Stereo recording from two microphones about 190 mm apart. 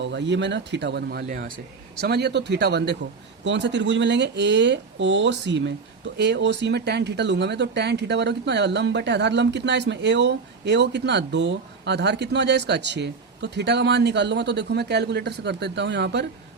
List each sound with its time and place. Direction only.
0.0 s speech: 70° right (ahead or behind)